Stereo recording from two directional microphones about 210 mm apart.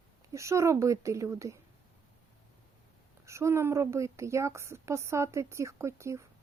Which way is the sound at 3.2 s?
15° right (ahead or behind).